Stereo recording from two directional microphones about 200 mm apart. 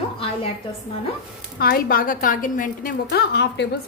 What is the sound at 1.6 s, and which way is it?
A woman's voice, 45° left (ahead or behind).